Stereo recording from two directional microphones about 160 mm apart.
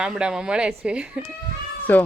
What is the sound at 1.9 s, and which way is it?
Speech, 10° left (ahead or behind).